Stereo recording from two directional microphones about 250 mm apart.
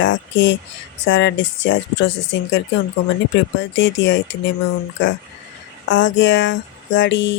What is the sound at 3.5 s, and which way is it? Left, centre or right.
Speech, left.